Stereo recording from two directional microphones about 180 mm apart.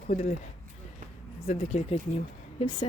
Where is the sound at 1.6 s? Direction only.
35° left (ahead or behind).